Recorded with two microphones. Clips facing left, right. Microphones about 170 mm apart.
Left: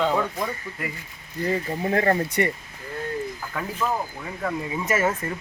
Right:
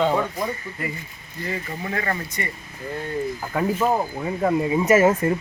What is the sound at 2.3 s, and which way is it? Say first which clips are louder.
Speech: left 7 dB; 65° left (ahead or behind).